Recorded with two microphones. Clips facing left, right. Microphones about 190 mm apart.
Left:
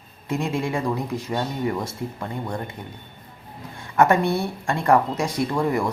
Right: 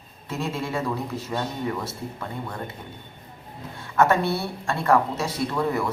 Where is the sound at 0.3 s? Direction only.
15° left (ahead or behind).